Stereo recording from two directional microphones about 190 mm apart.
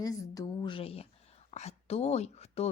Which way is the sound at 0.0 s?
20° left (ahead or behind).